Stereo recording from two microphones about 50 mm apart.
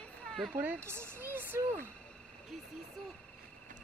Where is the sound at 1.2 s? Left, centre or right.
Right.